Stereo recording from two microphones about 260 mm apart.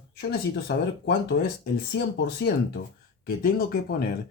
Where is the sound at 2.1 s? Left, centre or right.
Left.